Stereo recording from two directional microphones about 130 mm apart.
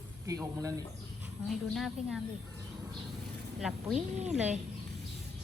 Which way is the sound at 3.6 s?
5° right (ahead or behind).